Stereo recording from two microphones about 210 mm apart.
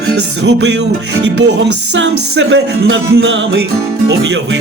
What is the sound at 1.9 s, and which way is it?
Music, 55° right (ahead or behind).